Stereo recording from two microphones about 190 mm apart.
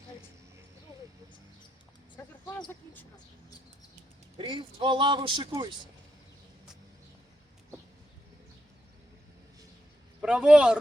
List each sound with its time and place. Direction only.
4.4 s speech: 25° right (ahead or behind)
10.2 s speech: 5° right (ahead or behind)